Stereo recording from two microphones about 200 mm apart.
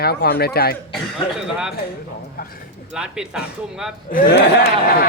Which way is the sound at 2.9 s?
5° right (ahead or behind).